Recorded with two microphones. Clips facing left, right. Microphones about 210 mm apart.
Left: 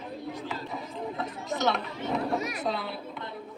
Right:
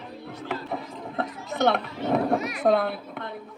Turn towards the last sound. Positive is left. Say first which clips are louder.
# right 7 dB
turn(degrees=-55)  # may be behind; listen again after turning